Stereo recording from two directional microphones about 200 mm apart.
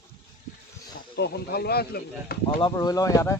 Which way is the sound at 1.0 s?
55° left (ahead or behind).